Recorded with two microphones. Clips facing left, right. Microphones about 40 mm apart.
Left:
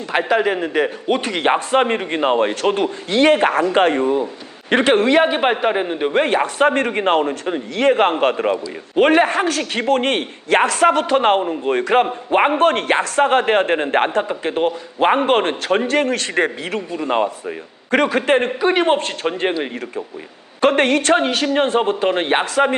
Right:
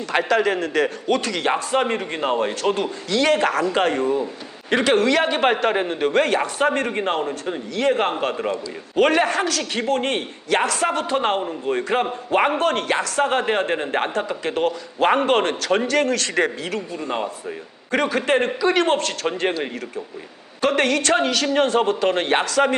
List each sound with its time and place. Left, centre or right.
0.1 s a man's voice: centre
6.4 s a man's voice: left
12.3 s a man's voice: left
17.9 s a man's voice: left
18.3 s a man's voice: left
18.7 s a man's voice: left
20.6 s a man's voice: left